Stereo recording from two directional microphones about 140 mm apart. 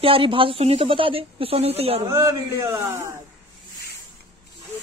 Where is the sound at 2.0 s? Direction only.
20° right (ahead or behind).